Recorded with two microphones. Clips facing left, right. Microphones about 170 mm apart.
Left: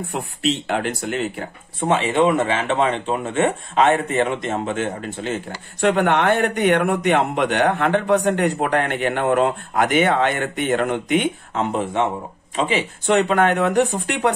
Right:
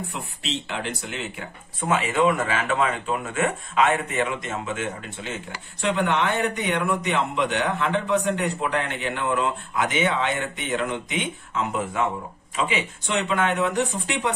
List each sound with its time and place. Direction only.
0.7 s speech: 50° left (ahead or behind)
1.8 s speech: 30° left (ahead or behind)
5.8 s a man's voice: 55° left (ahead or behind)
11.5 s speech: 30° left (ahead or behind)
13.2 s speech: 50° left (ahead or behind)